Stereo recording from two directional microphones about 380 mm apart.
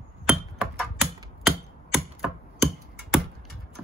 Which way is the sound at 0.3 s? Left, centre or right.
Centre.